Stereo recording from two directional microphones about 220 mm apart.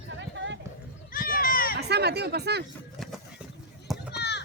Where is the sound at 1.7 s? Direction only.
50° right (ahead or behind).